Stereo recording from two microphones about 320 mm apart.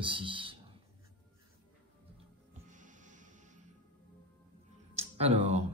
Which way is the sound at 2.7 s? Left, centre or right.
Right.